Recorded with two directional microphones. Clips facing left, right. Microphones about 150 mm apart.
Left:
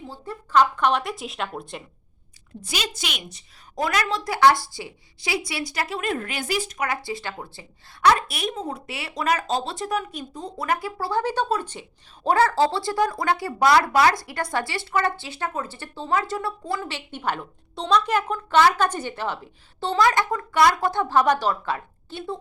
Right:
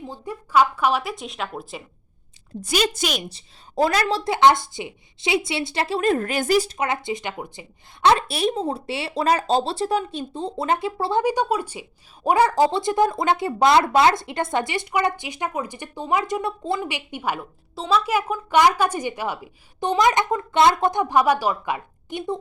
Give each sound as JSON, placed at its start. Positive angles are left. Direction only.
{"t": 0.0, "sound": "speech", "side_deg": -15}
{"t": 2.6, "sound": "a woman's voice", "side_deg": -45}
{"t": 6.7, "sound": "a woman's voice", "side_deg": -25}